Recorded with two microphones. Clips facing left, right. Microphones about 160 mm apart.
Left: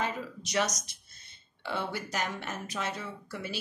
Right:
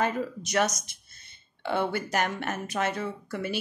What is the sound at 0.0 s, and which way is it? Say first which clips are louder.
A woman's voice: right 6 dB; 50° right (ahead or behind).